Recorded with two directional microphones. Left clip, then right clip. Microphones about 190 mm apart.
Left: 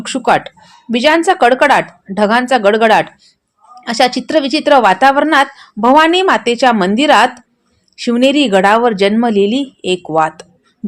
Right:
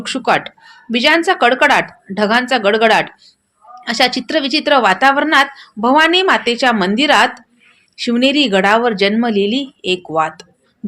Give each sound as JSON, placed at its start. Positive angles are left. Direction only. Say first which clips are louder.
{"t": 0.0, "sound": "a woman's voice", "louder": "left 3 dB", "side_deg": 45}